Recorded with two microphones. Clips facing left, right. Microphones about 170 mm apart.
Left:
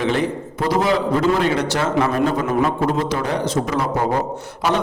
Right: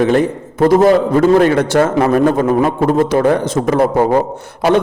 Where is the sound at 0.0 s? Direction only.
50° right (ahead or behind).